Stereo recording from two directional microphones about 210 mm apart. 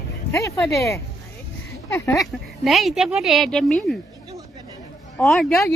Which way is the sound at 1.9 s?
10° left (ahead or behind).